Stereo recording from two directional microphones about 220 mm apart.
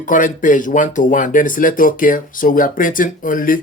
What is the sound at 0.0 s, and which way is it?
Speech, 35° left (ahead or behind).